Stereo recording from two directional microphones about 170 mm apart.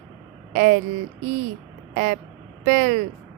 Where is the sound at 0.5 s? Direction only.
50° right (ahead or behind).